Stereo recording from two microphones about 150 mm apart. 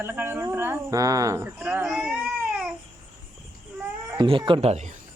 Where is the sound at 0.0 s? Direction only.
15° right (ahead or behind).